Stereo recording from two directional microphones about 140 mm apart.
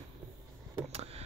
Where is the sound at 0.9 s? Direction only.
50° right (ahead or behind).